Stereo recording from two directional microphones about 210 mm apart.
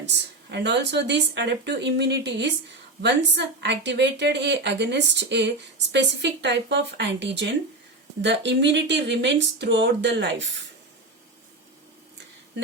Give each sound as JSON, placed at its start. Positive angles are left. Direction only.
{"t": 0.0, "sound": "a woman's voice", "side_deg": -55}